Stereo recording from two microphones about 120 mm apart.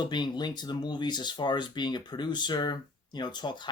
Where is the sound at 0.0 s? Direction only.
40° left (ahead or behind).